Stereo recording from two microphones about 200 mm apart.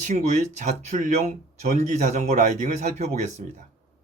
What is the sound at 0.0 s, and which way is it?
Speech, 35° right (ahead or behind).